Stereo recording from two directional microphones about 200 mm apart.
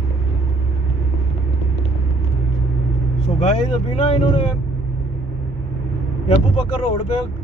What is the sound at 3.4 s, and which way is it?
Speech, 35° left (ahead or behind).